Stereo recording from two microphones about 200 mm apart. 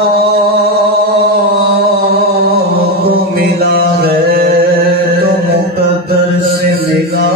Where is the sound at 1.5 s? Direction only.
50° right (ahead or behind).